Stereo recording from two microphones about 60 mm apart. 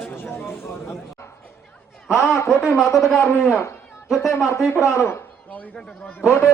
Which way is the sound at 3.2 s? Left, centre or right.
Left.